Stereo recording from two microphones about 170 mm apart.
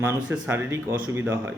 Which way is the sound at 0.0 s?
10° right (ahead or behind).